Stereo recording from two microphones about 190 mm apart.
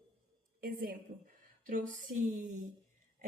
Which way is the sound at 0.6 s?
50° right (ahead or behind).